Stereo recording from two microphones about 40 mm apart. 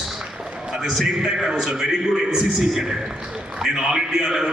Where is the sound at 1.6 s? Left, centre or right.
Centre.